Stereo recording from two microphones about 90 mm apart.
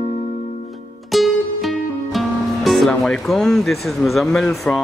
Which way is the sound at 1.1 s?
Centre (ahead or behind).